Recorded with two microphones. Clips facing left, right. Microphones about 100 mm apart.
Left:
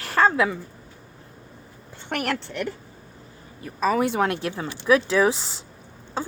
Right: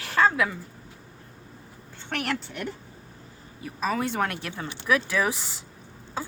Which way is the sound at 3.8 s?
5° left (ahead or behind).